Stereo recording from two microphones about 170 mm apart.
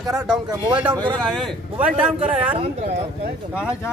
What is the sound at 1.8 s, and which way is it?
Speech, 10° right (ahead or behind).